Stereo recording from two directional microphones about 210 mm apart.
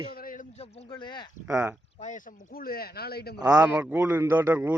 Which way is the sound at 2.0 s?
40° left (ahead or behind).